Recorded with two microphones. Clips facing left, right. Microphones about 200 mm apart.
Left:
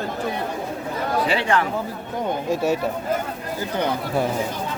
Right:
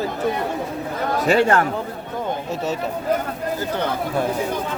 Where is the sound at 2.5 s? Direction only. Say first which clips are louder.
Left 6 dB; 10° left (ahead or behind).